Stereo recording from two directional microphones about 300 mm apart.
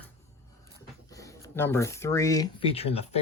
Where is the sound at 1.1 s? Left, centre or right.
Centre.